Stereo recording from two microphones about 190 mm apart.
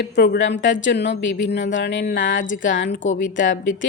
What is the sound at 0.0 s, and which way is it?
A woman's voice, 60° left (ahead or behind).